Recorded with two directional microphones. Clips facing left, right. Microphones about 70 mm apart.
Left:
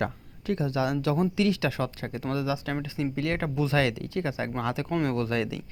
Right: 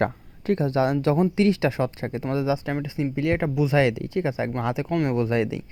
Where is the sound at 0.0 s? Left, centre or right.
Right.